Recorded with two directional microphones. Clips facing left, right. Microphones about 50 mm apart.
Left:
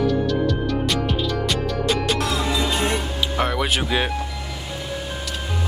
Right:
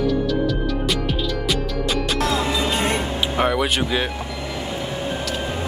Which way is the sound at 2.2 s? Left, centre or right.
Right.